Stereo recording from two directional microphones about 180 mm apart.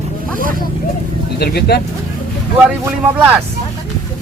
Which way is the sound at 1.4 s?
60° left (ahead or behind).